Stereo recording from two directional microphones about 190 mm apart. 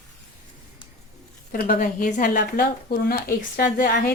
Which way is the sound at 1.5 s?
50° left (ahead or behind).